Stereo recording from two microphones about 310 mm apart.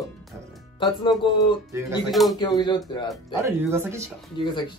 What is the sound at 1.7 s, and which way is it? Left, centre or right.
Speech, centre.